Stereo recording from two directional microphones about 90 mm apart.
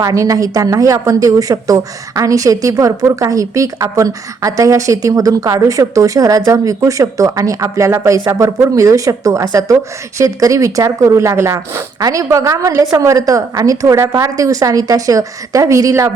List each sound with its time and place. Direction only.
0.0 s speech: 40° right (ahead or behind)